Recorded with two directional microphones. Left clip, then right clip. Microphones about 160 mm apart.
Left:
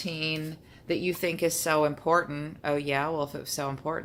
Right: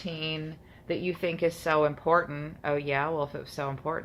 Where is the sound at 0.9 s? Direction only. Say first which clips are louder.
Left 2 dB; 20° left (ahead or behind).